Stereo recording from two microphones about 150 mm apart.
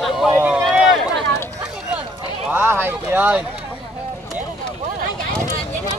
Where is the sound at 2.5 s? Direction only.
10° right (ahead or behind).